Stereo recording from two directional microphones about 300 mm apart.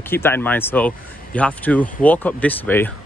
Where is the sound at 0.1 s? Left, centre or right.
Centre.